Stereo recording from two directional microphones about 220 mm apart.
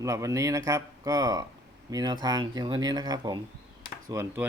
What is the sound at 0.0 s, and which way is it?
Speech, 15° right (ahead or behind).